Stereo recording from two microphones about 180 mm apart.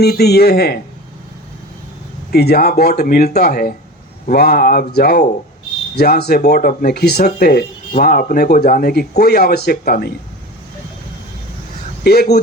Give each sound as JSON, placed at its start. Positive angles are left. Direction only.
{"t": 0.0, "sound": "speech", "side_deg": 65}
{"t": 2.3, "sound": "speech", "side_deg": 60}
{"t": 12.0, "sound": "speech", "side_deg": 60}